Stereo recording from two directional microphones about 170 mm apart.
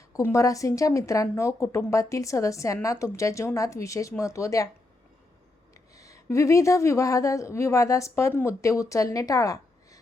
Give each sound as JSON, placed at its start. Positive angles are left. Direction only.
{"t": 0.1, "sound": "speech", "side_deg": 15}
{"t": 5.9, "sound": "a woman's voice", "side_deg": 20}